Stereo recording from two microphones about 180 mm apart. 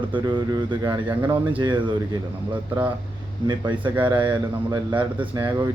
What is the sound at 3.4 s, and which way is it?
Speech, 25° right (ahead or behind).